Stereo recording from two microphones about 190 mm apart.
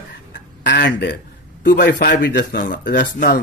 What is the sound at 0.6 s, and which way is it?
Speech, 65° left (ahead or behind).